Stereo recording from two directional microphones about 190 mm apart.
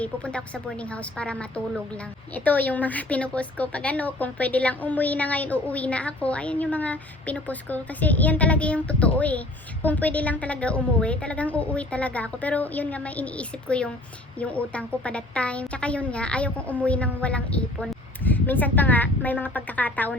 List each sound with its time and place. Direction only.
0.0 s a woman's voice: 5° left (ahead or behind)